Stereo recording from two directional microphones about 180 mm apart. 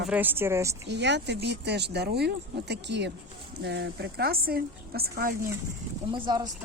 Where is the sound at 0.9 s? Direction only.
70° right (ahead or behind); by 5.5 s 55° right (ahead or behind).